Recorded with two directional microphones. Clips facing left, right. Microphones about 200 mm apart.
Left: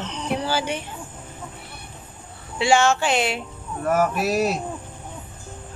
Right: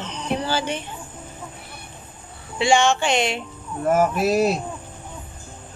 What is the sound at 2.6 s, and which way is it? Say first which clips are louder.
Speech: even; 5° left (ahead or behind).